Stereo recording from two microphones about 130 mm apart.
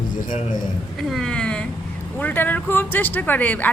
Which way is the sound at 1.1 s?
5° left (ahead or behind).